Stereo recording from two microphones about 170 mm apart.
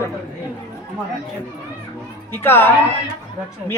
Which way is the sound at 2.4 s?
10° left (ahead or behind).